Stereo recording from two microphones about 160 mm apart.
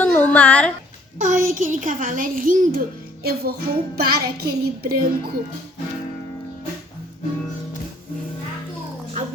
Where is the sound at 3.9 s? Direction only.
75° right (ahead or behind).